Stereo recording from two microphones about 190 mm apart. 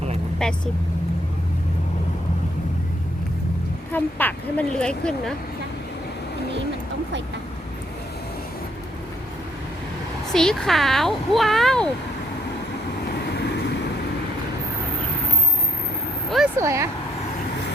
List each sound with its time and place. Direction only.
0.3 s speech: 5° left (ahead or behind)
3.9 s speech: 10° left (ahead or behind)
10.3 s speech: 5° left (ahead or behind)
13.2 s vehicle: 60° left (ahead or behind)
16.6 s speech: 15° right (ahead or behind)